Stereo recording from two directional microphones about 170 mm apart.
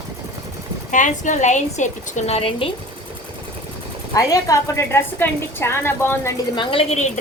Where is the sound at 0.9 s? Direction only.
45° left (ahead or behind).